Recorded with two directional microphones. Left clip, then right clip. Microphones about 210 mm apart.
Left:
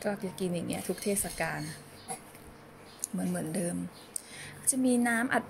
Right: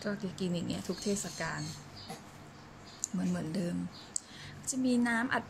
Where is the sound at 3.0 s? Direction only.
20° left (ahead or behind).